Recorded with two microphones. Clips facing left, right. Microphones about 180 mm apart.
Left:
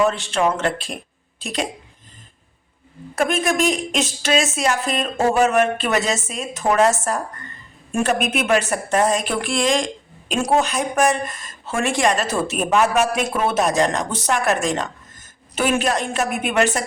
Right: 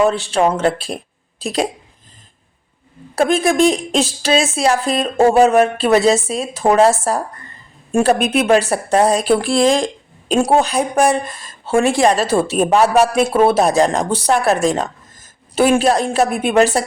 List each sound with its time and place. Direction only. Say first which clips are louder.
0.0 s speech: right 4 dB; 35° right (ahead or behind)
3.2 s speech: right 6 dB; 35° right (ahead or behind)